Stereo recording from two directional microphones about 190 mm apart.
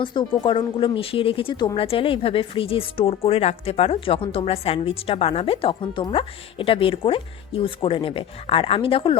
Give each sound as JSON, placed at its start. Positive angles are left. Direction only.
{"t": 0.0, "sound": "speech", "side_deg": 25}